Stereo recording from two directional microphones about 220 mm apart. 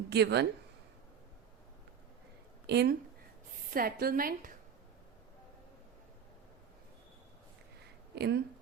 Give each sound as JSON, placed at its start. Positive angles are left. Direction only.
{"t": 0.1, "sound": "speech", "side_deg": -50}
{"t": 2.6, "sound": "a woman's voice", "side_deg": -50}
{"t": 8.1, "sound": "speech", "side_deg": -50}